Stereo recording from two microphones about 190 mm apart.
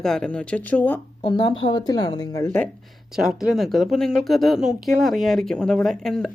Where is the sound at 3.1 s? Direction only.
Centre (ahead or behind).